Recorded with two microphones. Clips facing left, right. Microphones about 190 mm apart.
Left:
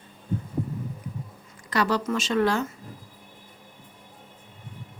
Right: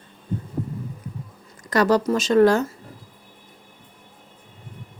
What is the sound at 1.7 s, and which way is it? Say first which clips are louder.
Speech: right 6 dB; 45° right (ahead or behind).